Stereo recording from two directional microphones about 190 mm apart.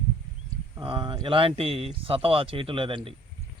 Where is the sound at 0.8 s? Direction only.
25° right (ahead or behind).